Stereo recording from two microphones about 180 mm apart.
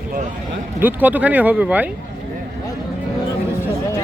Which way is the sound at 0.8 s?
10° right (ahead or behind).